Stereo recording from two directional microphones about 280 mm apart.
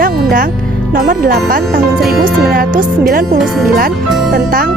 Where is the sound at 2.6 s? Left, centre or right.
Right.